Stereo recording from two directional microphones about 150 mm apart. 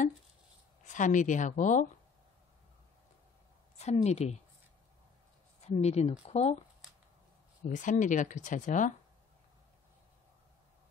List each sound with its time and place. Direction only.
0.8 s speech: 55° left (ahead or behind)
3.7 s a woman's voice: 45° left (ahead or behind)
5.6 s speech: 45° left (ahead or behind)
7.7 s speech: 55° left (ahead or behind)